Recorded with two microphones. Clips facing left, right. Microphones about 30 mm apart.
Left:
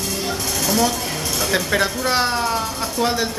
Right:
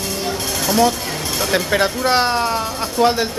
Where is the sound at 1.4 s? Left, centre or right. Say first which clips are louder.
Right 2 dB; centre.